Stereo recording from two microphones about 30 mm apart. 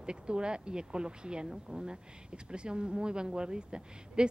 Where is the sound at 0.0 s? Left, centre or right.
Right.